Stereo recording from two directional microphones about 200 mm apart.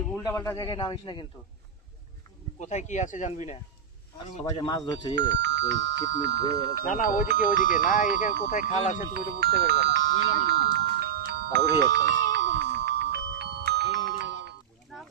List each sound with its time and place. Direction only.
0.2 s a man's voice: 15° left (ahead or behind)
2.6 s speech: 35° left (ahead or behind)
4.4 s a man's voice: 20° left (ahead or behind)
5.3 s speech: 60° right (ahead or behind)
6.8 s speech: 40° left (ahead or behind)
9.1 s speech: 55° right (ahead or behind)
11.3 s music: 50° right (ahead or behind)